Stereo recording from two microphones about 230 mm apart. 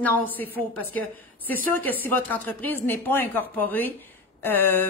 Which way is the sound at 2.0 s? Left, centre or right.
Centre.